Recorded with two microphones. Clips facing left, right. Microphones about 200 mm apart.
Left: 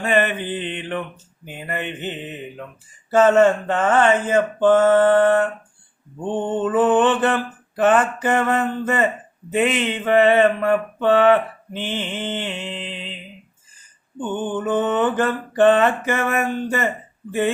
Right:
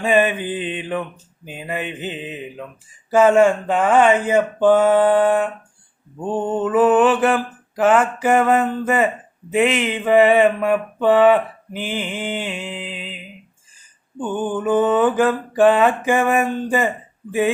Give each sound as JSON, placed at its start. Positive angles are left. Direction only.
{"t": 0.0, "sound": "speech", "side_deg": -15}
{"t": 9.6, "sound": "speech", "side_deg": -90}
{"t": 9.8, "sound": "speech", "side_deg": -10}
{"t": 14.2, "sound": "speech", "side_deg": -10}